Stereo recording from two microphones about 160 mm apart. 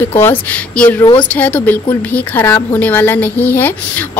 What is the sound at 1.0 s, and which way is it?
Speech, 30° left (ahead or behind).